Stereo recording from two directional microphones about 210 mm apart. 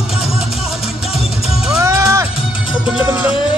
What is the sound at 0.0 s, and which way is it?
Music, 25° left (ahead or behind).